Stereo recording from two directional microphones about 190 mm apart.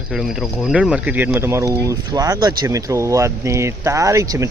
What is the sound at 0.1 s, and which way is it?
Speech, centre (ahead or behind).